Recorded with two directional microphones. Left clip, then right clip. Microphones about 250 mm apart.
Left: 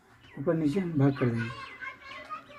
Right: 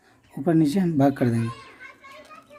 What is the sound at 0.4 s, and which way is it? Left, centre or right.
Speech, right.